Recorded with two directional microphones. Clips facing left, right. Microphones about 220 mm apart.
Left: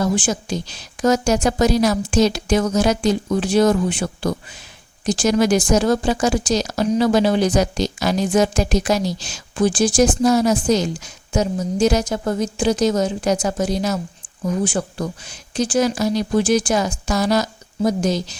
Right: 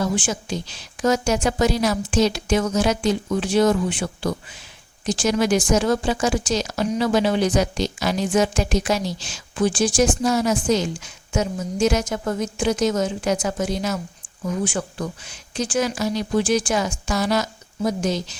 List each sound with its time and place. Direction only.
0.0 s speech: 40° left (ahead or behind)